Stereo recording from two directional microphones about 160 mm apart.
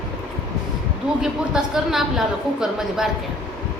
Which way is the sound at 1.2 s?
5° right (ahead or behind).